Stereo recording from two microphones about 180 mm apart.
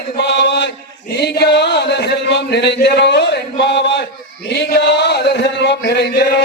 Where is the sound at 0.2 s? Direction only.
70° left (ahead or behind).